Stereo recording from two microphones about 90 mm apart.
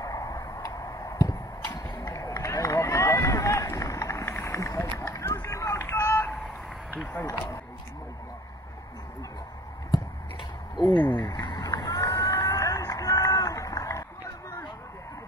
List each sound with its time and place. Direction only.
0.0 s tick: 40° left (ahead or behind)
2.0 s run: 35° left (ahead or behind)
10.8 s a sound: 55° left (ahead or behind)
11.1 s run: 45° left (ahead or behind)